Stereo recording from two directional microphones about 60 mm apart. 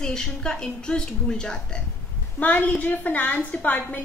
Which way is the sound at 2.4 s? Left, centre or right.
Left.